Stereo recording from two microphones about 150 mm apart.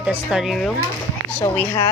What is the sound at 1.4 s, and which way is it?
Speech, 20° left (ahead or behind).